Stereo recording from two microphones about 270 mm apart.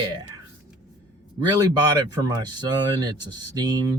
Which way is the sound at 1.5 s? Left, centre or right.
Centre.